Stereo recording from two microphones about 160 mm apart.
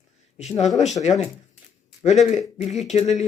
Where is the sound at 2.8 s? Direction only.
45° left (ahead or behind).